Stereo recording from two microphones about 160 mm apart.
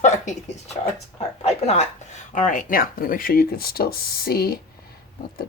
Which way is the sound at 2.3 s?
55° left (ahead or behind).